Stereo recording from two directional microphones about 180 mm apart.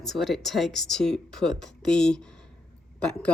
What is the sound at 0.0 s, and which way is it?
Speech, centre (ahead or behind).